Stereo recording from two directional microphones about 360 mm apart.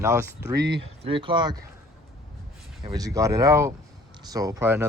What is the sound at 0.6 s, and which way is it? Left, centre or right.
Speech, right.